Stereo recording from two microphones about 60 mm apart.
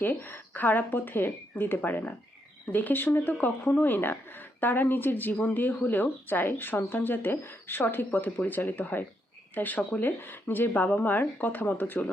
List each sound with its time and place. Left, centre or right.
0.0 s speech: left